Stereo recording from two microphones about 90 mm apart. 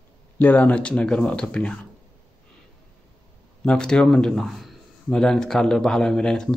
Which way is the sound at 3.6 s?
10° left (ahead or behind).